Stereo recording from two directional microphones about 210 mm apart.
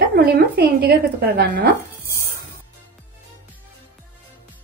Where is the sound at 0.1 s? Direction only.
50° right (ahead or behind).